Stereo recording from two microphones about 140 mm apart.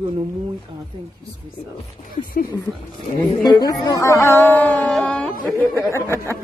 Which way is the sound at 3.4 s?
30° left (ahead or behind).